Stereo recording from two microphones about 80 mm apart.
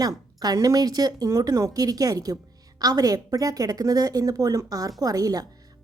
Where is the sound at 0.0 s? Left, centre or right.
Right.